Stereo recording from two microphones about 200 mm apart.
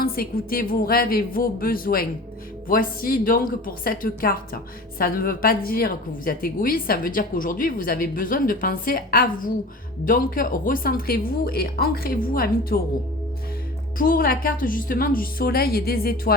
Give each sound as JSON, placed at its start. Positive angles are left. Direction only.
{"t": 0.0, "sound": "a woman's voice", "side_deg": 50}
{"t": 14.0, "sound": "a woman's voice", "side_deg": 45}